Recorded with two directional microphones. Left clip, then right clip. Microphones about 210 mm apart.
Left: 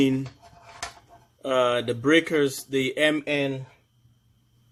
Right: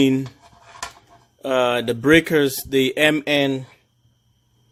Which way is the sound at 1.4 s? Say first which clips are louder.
Right 3 dB; 45° right (ahead or behind).